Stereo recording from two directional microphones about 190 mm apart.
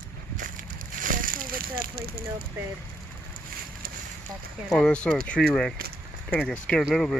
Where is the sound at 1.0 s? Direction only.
45° right (ahead or behind).